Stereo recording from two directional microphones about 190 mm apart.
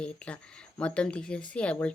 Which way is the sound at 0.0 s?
5° left (ahead or behind).